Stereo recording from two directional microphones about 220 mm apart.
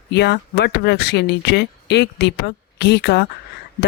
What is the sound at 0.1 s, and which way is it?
Speech, 50° left (ahead or behind).